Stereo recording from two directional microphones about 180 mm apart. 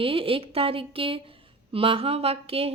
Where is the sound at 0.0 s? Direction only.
30° right (ahead or behind).